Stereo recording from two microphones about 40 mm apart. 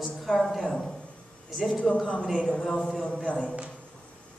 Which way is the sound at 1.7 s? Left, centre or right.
Centre.